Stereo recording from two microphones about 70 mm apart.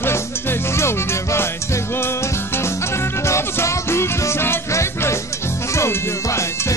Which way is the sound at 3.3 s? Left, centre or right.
Left.